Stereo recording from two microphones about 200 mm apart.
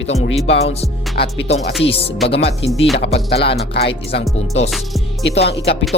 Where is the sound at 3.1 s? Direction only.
30° left (ahead or behind).